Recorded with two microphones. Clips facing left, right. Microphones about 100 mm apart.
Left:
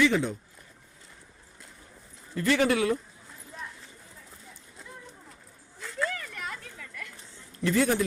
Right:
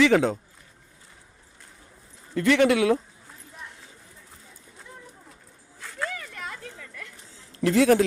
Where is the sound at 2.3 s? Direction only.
65° right (ahead or behind); by 3.0 s 90° right.